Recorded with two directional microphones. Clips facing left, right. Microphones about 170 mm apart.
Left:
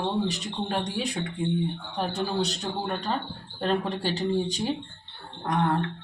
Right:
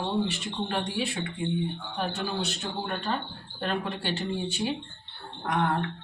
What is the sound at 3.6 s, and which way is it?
Speech, 35° left (ahead or behind).